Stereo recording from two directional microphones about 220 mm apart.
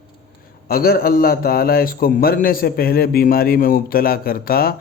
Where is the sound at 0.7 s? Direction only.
40° left (ahead or behind).